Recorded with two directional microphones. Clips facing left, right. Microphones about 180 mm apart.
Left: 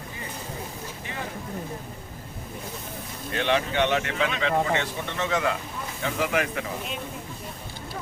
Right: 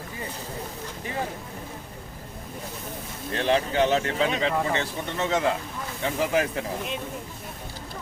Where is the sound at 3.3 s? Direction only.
35° right (ahead or behind).